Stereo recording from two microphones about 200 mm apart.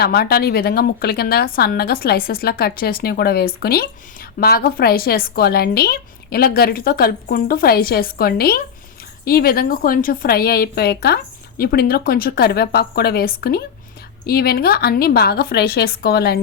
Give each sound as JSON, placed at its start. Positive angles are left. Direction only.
{"t": 0.0, "sound": "a woman's voice", "side_deg": 50}